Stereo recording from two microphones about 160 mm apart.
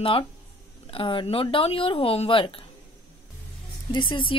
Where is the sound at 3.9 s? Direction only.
30° left (ahead or behind).